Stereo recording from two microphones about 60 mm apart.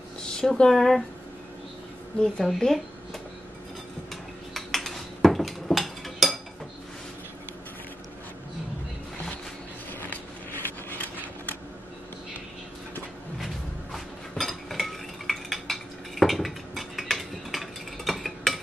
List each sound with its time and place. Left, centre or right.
0.2 s speech: centre
2.4 s speech: centre
4.6 s a sound: centre
5.2 s dishes: centre
9.9 s a sound: left
13.9 s cutlery: centre